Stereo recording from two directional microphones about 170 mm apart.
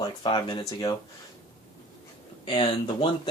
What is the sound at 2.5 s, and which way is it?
Speech, 25° left (ahead or behind).